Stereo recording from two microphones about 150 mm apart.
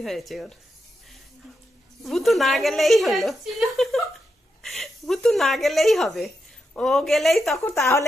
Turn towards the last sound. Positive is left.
turn(degrees=20)  # may be behind; listen again after turning